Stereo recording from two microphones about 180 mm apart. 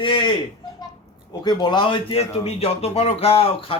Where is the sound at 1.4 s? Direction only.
25° left (ahead or behind).